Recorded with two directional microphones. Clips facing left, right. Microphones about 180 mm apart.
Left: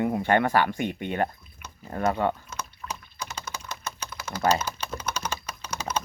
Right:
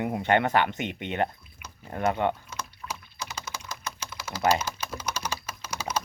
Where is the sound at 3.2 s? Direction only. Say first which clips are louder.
Left 1 dB; 10° right (ahead or behind).